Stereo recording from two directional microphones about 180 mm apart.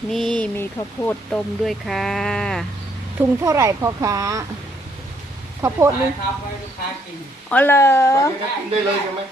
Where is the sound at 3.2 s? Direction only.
15° right (ahead or behind).